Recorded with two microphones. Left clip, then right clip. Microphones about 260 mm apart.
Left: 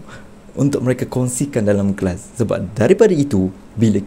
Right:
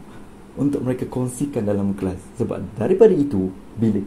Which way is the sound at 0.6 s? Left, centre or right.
Left.